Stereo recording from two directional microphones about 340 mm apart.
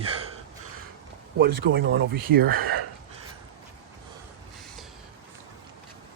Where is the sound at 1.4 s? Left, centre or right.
Right.